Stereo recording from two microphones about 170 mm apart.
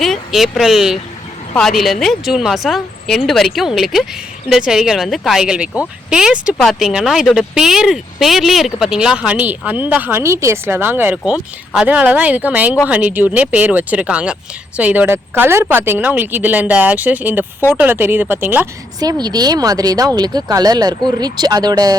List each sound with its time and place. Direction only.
0.0 s speech: centre (ahead or behind)
18.9 s speech: 25° right (ahead or behind)